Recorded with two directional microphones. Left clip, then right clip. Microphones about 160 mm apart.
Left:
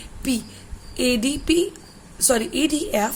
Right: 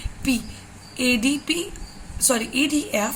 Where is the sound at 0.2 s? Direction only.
45° left (ahead or behind).